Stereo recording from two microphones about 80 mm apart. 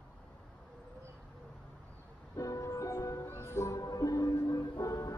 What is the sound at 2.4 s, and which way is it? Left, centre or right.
Music, left.